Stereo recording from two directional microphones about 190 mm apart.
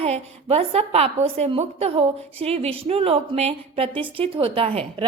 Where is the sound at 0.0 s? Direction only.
35° right (ahead or behind).